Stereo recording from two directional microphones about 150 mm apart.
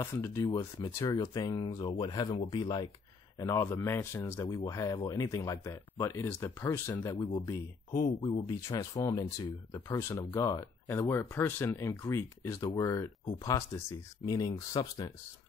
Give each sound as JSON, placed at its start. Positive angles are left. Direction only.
{"t": 0.0, "sound": "speech", "side_deg": 20}
{"t": 0.9, "sound": "speech", "side_deg": 20}
{"t": 3.3, "sound": "speech", "side_deg": 20}
{"t": 9.8, "sound": "speech", "side_deg": 15}